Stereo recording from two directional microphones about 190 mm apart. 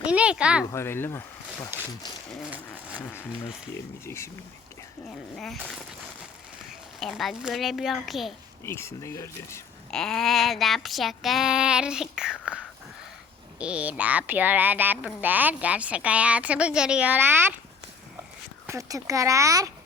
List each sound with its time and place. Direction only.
0.0 s child singing: 5° right (ahead or behind)
0.7 s speech: 15° left (ahead or behind)
2.3 s child singing: 5° right (ahead or behind)
4.0 s speech: 15° left (ahead or behind)
5.4 s child singing: centre (ahead or behind)
7.0 s child singing: centre (ahead or behind)
8.6 s speech: 15° left (ahead or behind)
9.9 s child singing: 5° left (ahead or behind)
13.6 s speech: 5° right (ahead or behind)
18.6 s speech: 15° right (ahead or behind)